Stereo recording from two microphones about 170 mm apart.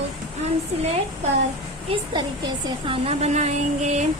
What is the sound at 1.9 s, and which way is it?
A woman's voice, 35° right (ahead or behind).